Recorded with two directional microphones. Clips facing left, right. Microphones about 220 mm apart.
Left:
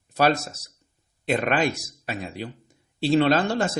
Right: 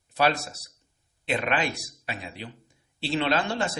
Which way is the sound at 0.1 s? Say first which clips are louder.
Left 3 dB; 45° left (ahead or behind).